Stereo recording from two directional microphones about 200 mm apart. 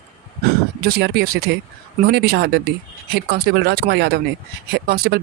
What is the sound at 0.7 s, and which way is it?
Speech, 50° right (ahead or behind).